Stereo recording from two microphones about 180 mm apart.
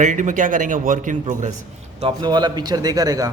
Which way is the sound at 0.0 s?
45° right (ahead or behind).